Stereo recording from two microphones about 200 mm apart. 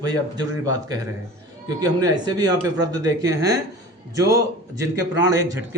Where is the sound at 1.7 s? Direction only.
20° right (ahead or behind).